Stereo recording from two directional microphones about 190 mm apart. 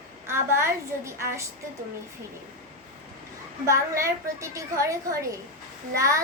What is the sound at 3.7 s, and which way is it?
A woman's voice, 15° right (ahead or behind).